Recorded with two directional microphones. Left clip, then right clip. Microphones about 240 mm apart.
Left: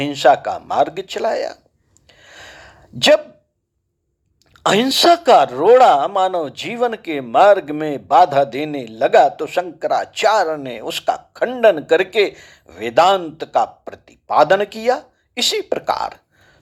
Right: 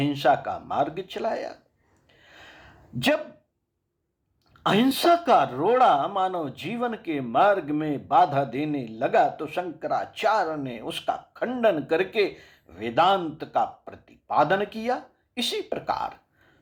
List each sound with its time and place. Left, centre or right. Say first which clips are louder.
0.0 s speech: left 9 dB; left
2.0 s a sound: left 9 dB; left
4.5 s speech: left 8 dB; left